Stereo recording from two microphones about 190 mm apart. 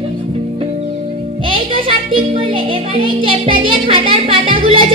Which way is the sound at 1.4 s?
30° right (ahead or behind).